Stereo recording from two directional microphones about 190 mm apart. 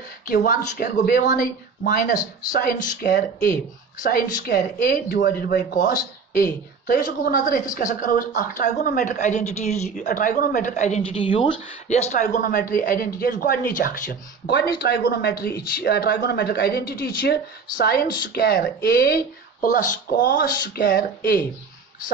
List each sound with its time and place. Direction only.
0.3 s a man's voice: 45° left (ahead or behind)